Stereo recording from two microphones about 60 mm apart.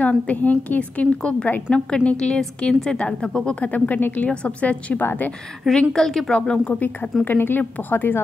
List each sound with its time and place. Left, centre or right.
0.3 s a woman's voice: left
4.3 s a woman's voice: centre
5.7 s a woman's voice: centre; by 8.2 s left